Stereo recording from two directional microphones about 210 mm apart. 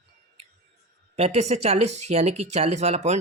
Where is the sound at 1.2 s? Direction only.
30° right (ahead or behind).